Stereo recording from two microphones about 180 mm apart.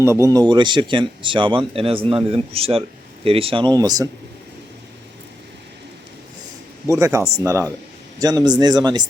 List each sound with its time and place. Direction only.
0.0 s a man's voice: 15° right (ahead or behind)
6.8 s a man's voice: 15° right (ahead or behind)